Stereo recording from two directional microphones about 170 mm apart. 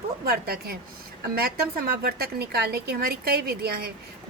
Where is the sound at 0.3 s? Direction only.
65° right (ahead or behind).